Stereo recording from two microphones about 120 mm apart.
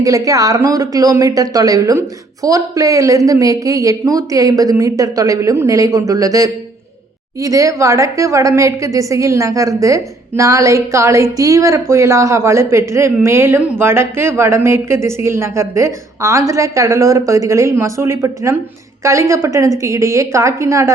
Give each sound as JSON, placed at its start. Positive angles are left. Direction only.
{"t": 0.0, "sound": "speech", "side_deg": -30}